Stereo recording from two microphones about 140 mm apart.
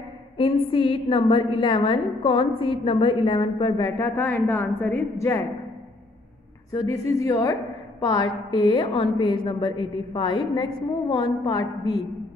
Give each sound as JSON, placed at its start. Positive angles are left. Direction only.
{"t": 0.4, "sound": "a woman's voice", "side_deg": 40}
{"t": 4.0, "sound": "a woman's voice", "side_deg": 15}
{"t": 6.9, "sound": "a woman's voice", "side_deg": 25}